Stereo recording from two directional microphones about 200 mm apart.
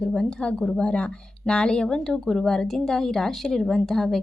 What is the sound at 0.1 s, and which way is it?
A woman's voice, 5° left (ahead or behind).